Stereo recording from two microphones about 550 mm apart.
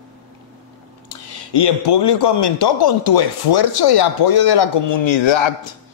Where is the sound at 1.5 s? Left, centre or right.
Left.